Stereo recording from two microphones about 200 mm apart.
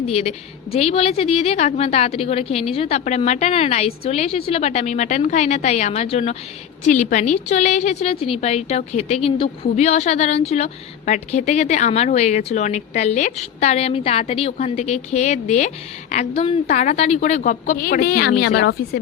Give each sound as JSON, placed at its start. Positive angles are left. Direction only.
{"t": 0.1, "sound": "a woman's voice", "side_deg": 30}